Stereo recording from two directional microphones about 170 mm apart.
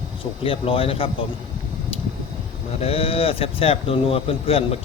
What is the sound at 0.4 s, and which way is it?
Speech, 30° left (ahead or behind).